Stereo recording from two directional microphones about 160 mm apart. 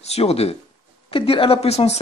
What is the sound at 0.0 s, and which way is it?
Speech, 40° left (ahead or behind).